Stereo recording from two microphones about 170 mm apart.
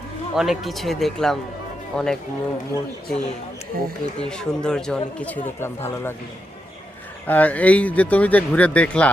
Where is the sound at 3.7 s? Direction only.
60° right (ahead or behind).